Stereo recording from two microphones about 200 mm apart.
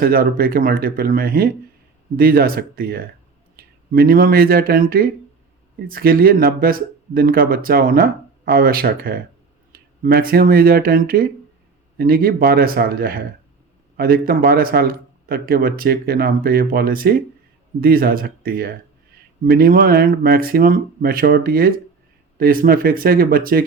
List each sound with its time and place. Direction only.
0.0 s speech: 50° right (ahead or behind)